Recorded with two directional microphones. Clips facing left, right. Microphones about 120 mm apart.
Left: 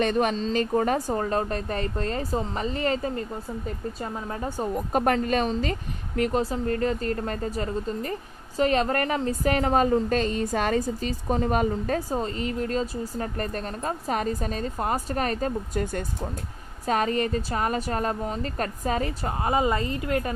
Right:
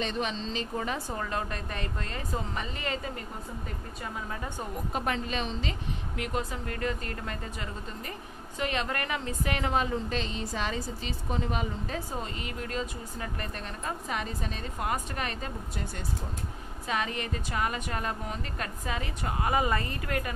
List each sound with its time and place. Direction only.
0.0 s a woman's voice: 50° left (ahead or behind); by 4.6 s 35° left (ahead or behind)
4.9 s a woman's voice: 50° left (ahead or behind); by 20.3 s 30° left (ahead or behind)